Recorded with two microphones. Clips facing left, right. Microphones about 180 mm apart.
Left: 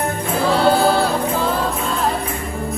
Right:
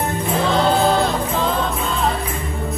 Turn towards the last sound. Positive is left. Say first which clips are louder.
# left 1 dB
turn(degrees=5)  # may be behind; listen again after turning